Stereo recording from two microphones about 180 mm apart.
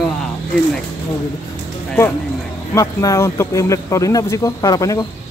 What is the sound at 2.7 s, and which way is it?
Speech, 20° left (ahead or behind).